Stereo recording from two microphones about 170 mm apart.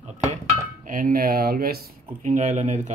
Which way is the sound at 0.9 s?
55° right (ahead or behind).